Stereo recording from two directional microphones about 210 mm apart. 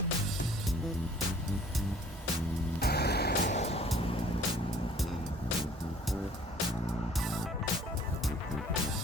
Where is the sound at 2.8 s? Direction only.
50° left (ahead or behind).